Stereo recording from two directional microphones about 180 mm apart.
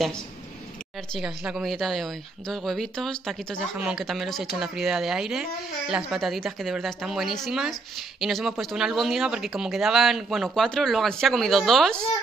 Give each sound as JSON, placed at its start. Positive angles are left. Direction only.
{"t": 1.1, "sound": "speech", "side_deg": -5}